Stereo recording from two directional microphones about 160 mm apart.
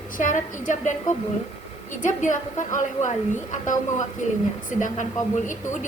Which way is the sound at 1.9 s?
55° left (ahead or behind).